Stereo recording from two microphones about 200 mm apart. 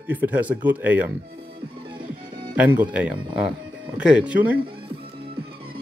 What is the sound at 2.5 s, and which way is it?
Speech, 10° right (ahead or behind).